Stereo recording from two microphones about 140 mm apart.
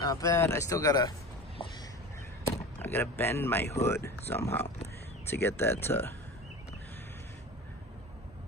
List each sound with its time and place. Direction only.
0.0 s speech: 25° left (ahead or behind)
2.8 s speech: 15° left (ahead or behind)